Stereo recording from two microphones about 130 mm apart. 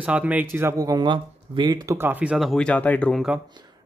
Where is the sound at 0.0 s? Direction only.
10° right (ahead or behind); by 2.0 s 35° right (ahead or behind).